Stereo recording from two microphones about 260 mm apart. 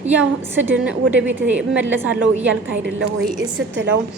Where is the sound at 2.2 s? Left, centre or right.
Right.